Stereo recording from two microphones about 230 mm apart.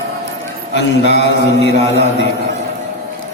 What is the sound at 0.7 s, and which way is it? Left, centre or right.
A man's voice, left.